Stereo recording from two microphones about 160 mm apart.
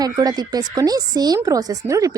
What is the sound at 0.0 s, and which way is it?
A woman's voice, 25° right (ahead or behind).